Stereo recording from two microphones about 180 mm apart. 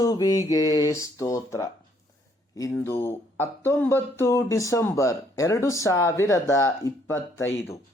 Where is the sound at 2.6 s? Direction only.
15° left (ahead or behind).